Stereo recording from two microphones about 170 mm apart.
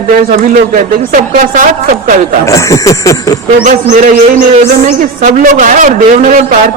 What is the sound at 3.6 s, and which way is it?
Speech, 45° right (ahead or behind).